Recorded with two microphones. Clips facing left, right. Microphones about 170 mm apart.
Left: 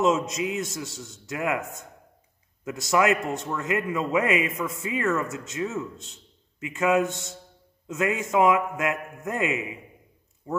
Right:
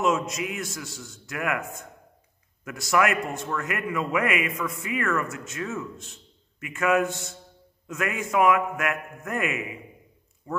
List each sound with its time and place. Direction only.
0.0 s a man's voice: 20° left (ahead or behind)